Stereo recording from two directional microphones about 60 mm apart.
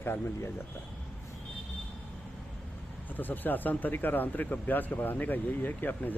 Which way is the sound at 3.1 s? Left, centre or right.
Left.